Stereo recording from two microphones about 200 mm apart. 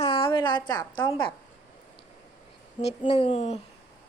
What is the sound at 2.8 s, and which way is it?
Speech, 30° left (ahead or behind).